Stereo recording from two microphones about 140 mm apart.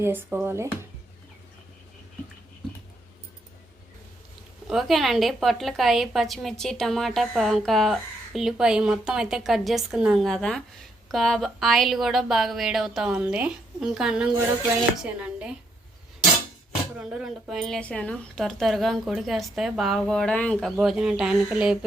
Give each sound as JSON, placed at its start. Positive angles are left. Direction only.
{"t": 0.0, "sound": "speech", "side_deg": -15}
{"t": 4.7, "sound": "a woman's voice", "side_deg": 0}
{"t": 15.2, "sound": "a sound", "side_deg": -10}
{"t": 17.0, "sound": "a woman's voice", "side_deg": -5}